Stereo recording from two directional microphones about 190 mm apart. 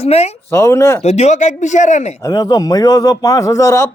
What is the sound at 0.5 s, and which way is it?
Speech, 15° left (ahead or behind).